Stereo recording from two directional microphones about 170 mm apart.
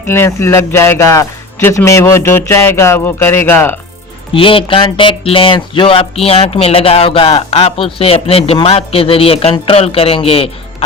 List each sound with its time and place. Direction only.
0.0 s speech: 15° left (ahead or behind)
4.3 s speech: 30° left (ahead or behind)